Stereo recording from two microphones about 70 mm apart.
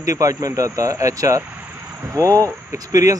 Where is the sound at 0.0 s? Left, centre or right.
Right.